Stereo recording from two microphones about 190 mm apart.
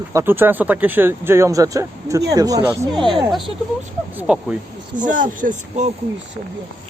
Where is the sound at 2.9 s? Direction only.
Centre (ahead or behind).